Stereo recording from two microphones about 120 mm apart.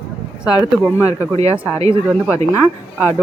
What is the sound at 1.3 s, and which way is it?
Speech, 55° right (ahead or behind).